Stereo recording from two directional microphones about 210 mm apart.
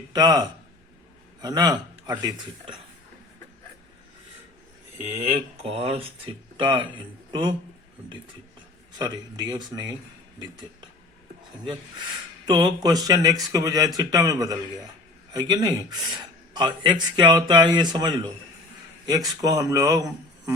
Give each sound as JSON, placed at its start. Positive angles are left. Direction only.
{"t": 0.1, "sound": "a man's voice", "side_deg": -20}
{"t": 5.3, "sound": "speech", "side_deg": -30}
{"t": 9.0, "sound": "speech", "side_deg": -20}
{"t": 12.5, "sound": "speech", "side_deg": -20}